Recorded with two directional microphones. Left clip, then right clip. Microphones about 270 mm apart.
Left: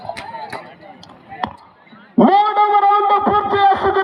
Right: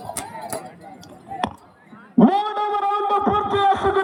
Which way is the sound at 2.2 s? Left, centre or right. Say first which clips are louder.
Left 7 dB; centre.